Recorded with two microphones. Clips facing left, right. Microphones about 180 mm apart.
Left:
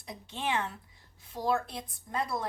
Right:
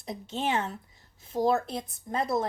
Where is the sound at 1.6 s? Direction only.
25° right (ahead or behind).